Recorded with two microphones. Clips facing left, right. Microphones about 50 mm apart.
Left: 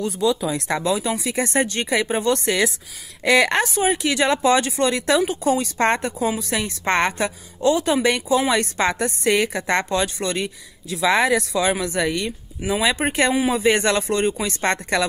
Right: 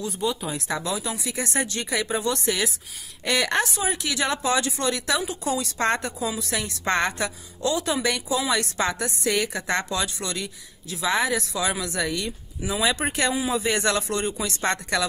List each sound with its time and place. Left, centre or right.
0.7 s speech: left
1.0 s a woman's voice: left
11.0 s speech: left
11.6 s a woman's voice: left
13.3 s speech: left
13.6 s a woman's voice: left